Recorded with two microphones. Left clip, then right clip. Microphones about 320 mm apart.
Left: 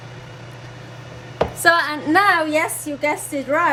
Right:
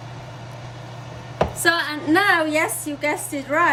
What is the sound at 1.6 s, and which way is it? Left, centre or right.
Music, centre.